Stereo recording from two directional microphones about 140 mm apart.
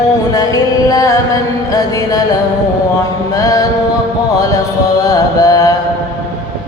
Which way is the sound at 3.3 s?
25° left (ahead or behind).